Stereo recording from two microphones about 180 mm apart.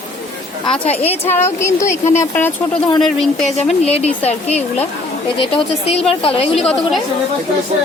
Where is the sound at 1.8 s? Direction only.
40° left (ahead or behind).